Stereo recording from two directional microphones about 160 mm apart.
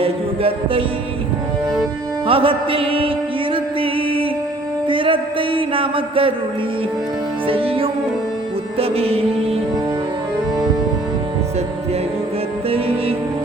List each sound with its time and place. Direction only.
0.0 s music: 35° right (ahead or behind)
2.2 s music: 35° right (ahead or behind)
4.9 s a sound: 35° right (ahead or behind)
7.4 s music: 35° right (ahead or behind)
12.6 s music: 35° right (ahead or behind)